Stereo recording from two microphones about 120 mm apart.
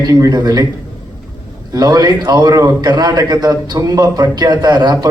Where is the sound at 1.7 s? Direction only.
30° right (ahead or behind).